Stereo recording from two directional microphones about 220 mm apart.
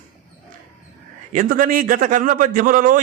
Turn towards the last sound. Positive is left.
turn(degrees=-35)  # may be behind; listen again after turning